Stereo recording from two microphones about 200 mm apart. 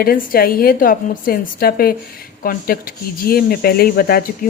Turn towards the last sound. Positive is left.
turn(degrees=50)  # may be behind; listen again after turning